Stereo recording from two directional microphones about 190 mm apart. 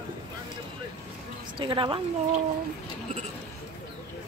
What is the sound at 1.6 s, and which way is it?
Speech, 25° right (ahead or behind).